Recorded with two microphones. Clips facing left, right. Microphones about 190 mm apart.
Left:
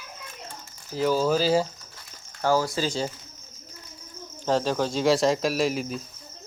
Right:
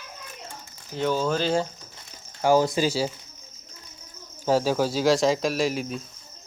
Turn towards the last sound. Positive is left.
turn(degrees=0)  # may be behind; listen again after turning